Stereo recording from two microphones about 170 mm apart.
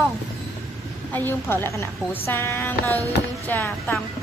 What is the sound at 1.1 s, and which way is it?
Speech, 10° left (ahead or behind).